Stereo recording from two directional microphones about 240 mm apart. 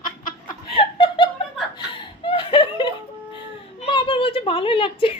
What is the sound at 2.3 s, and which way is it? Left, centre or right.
Snicker, left.